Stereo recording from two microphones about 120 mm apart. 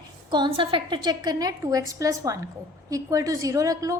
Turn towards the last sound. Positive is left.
turn(degrees=-25)  # may be behind; listen again after turning